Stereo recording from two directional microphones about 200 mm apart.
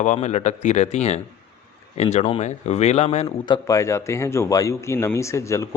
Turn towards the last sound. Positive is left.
turn(degrees=15)  # may be behind; listen again after turning